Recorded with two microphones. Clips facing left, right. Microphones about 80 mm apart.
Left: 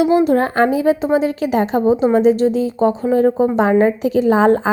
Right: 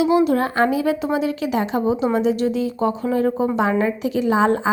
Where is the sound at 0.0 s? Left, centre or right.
Left.